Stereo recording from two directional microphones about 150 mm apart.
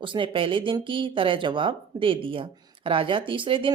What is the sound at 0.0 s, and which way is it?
Speech, 35° right (ahead or behind).